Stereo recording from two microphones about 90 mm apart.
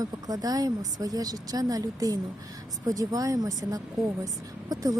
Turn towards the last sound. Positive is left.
turn(degrees=-40)  # may be behind; listen again after turning